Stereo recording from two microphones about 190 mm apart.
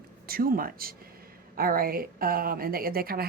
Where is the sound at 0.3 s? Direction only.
50° right (ahead or behind).